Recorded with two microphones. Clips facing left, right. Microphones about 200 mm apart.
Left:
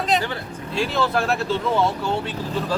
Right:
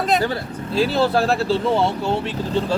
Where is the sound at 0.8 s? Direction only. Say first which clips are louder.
Right 4 dB; 35° right (ahead or behind).